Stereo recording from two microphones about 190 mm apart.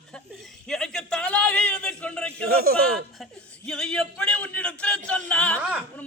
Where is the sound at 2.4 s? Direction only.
50° right (ahead or behind).